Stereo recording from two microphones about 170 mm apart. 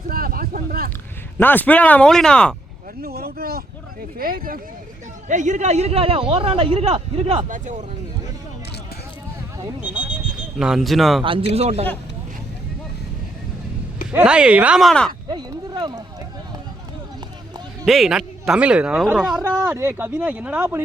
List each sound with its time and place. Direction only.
0.1 s a sound: 60° right (ahead or behind)
1.4 s speech: 10° left (ahead or behind)
3.0 s speech: 65° right (ahead or behind)
5.3 s a man's voice: 45° right (ahead or behind)
7.4 s speech: 50° right (ahead or behind)
10.6 s speech: centre (ahead or behind)
11.2 s a man's voice: 30° right (ahead or behind)
14.1 s speech: 10° right (ahead or behind)
15.3 s speech: 25° right (ahead or behind)
17.8 s speech: centre (ahead or behind)
19.6 s speech: 15° right (ahead or behind)